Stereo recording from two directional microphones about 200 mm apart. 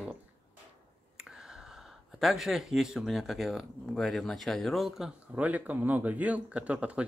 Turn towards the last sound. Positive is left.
turn(degrees=-5)  # may be behind; listen again after turning